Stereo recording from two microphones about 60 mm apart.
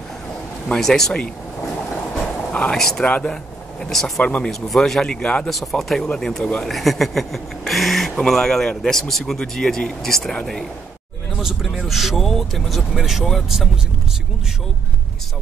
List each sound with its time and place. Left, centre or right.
0.7 s speech: centre
2.7 s speech: centre
4.2 s speech: centre
4.5 s speech: centre
5.5 s speech: centre
6.7 s speech: centre
11.8 s speech: centre